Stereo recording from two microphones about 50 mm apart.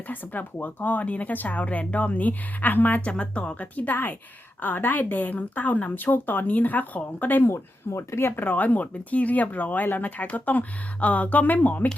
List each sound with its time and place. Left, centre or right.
0.1 s speech: left
3.0 s a woman's voice: left
7.9 s speech: left
8.2 s speech: left